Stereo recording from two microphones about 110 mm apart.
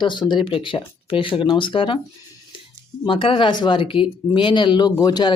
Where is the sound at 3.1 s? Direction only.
50° left (ahead or behind).